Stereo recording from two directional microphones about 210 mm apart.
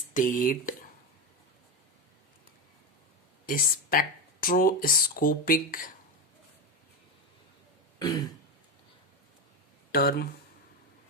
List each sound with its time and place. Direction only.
0.1 s speech: 40° left (ahead or behind)
3.4 s speech: 40° left (ahead or behind)
7.9 s throat clearing: 20° left (ahead or behind)
9.9 s speech: 50° left (ahead or behind)